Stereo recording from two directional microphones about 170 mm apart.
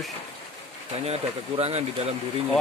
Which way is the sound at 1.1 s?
40° right (ahead or behind).